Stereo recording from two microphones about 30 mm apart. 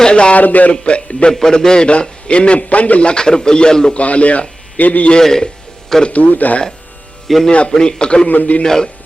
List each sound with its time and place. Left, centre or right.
0.0 s a man's voice: left
0.3 s speech: left
0.7 s a man's voice: left
1.3 s a man's voice: centre; by 2.6 s left
2.6 s speech: left
3.0 s a man's voice: left
3.9 s a man's voice: left
5.2 s a man's voice: centre
6.1 s speech: left
7.3 s speech: centre
7.7 s a man's voice: left
8.3 s a man's voice: left
8.6 s a man's voice: centre